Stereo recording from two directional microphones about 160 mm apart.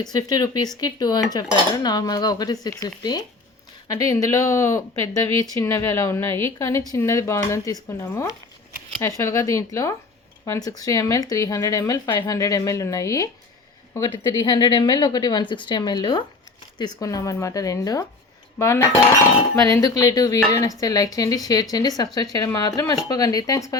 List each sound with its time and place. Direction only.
0.0 s a woman's voice: 25° left (ahead or behind)